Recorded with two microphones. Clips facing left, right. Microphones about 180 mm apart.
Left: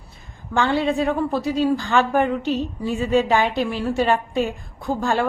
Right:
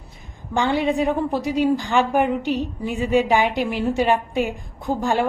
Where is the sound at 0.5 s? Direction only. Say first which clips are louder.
Even; 15° right (ahead or behind).